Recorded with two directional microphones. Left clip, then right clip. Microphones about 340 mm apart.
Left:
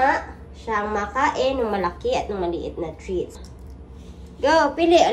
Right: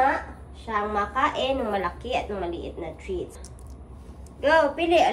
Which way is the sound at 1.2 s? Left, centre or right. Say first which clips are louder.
Left 6 dB; centre.